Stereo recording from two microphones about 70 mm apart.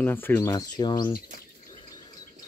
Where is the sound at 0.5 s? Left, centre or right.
Left.